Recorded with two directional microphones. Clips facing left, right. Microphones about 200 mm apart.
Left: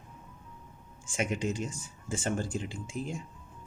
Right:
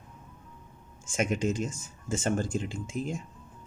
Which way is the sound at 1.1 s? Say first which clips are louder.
Right 3 dB; 45° right (ahead or behind).